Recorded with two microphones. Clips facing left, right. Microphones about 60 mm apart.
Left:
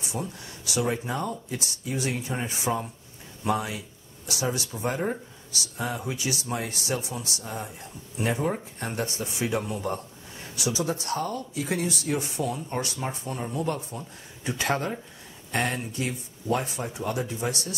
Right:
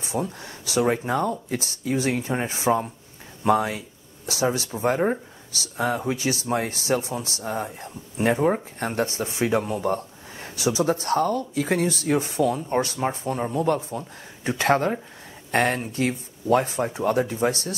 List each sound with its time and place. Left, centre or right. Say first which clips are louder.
0.0 s speech: right 6 dB; right